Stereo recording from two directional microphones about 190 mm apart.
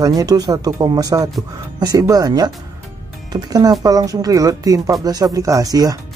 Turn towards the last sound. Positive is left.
turn(degrees=-20)  # may be behind; listen again after turning